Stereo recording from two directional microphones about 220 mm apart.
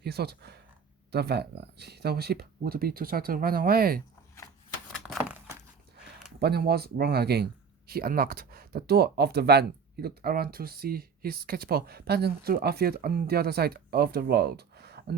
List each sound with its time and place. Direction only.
0.0 s speech: 45° right (ahead or behind)
4.9 s a sound: centre (ahead or behind)
6.4 s speech: 45° right (ahead or behind)